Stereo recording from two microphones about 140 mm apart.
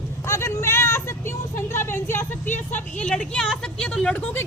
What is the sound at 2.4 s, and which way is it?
Speech, 60° left (ahead or behind).